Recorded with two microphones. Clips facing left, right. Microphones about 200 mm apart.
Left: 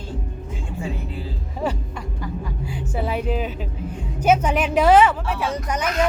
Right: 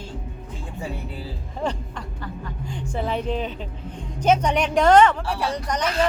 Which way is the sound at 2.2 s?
5° left (ahead or behind).